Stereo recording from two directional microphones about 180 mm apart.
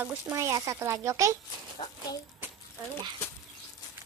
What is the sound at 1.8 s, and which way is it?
Speech, 30° left (ahead or behind).